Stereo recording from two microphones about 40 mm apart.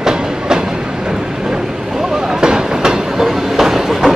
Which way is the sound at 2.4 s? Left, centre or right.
Centre.